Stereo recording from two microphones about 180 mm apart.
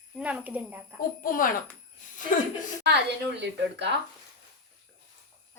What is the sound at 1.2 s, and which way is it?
Speech, 50° left (ahead or behind).